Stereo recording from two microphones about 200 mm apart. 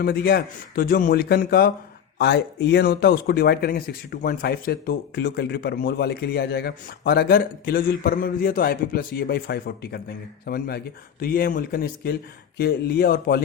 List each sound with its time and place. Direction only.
0.0 s a man's voice: 50° left (ahead or behind)